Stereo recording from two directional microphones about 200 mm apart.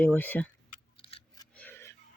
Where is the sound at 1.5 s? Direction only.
10° left (ahead or behind).